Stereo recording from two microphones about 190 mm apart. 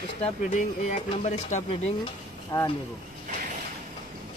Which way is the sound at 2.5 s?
20° left (ahead or behind).